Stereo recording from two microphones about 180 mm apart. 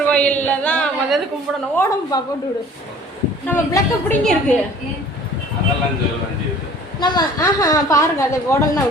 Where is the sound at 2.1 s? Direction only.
20° left (ahead or behind).